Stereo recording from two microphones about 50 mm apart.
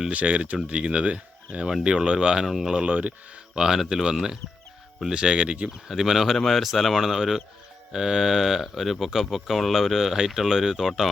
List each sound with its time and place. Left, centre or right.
0.1 s speech: right; by 2.8 s centre
2.8 s speech: right
3.5 s speech: centre
5.9 s speech: centre